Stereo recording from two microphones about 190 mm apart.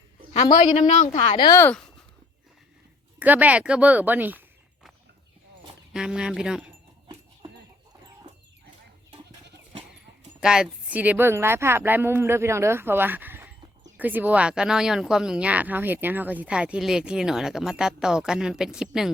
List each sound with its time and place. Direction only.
0.7 s a woman's voice: 35° left (ahead or behind)
1.4 s speech: 15° left (ahead or behind)
3.2 s speech: 10° right (ahead or behind)
5.9 s speech: 5° right (ahead or behind)
10.4 s speech: 5° right (ahead or behind)